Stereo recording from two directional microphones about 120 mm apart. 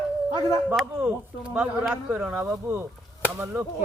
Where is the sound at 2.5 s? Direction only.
20° right (ahead or behind).